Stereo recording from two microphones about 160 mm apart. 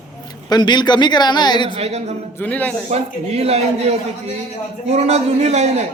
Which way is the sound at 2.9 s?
40° right (ahead or behind).